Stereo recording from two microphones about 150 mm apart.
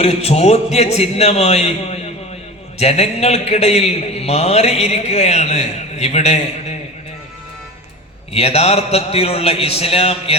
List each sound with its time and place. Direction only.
0.0 s a man's voice: 45° left (ahead or behind)
8.3 s a man's voice: 45° left (ahead or behind)